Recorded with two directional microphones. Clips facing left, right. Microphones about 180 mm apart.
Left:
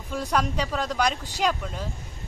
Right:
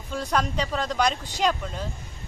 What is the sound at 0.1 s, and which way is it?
Speech, 10° left (ahead or behind).